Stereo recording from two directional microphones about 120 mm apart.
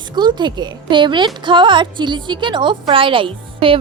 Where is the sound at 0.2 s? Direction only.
40° right (ahead or behind).